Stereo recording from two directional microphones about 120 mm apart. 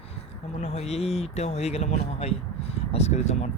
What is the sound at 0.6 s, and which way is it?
Speech, 60° left (ahead or behind).